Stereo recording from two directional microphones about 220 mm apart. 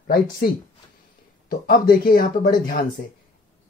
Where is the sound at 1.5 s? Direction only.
40° left (ahead or behind).